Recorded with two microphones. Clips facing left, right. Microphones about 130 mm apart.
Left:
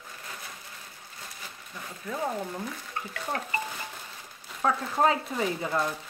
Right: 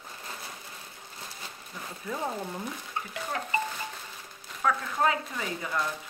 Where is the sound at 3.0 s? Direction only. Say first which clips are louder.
Right 1 dB; 20° right (ahead or behind).